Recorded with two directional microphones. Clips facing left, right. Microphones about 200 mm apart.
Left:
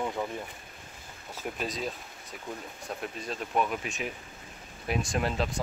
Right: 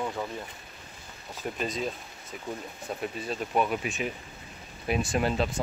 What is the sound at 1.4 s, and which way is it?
Speech, centre (ahead or behind).